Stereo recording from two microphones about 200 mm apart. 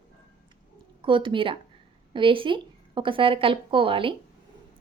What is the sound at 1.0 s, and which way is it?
Speech, 25° right (ahead or behind).